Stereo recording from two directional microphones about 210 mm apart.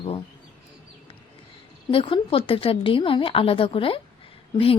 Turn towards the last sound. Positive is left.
turn(degrees=25)  # may be behind; listen again after turning